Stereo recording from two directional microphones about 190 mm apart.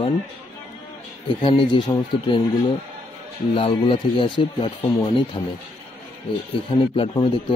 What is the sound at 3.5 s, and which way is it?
Speech, 25° left (ahead or behind).